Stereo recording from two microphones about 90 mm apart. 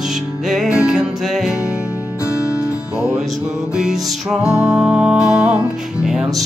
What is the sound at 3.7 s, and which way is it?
Music, 10° right (ahead or behind).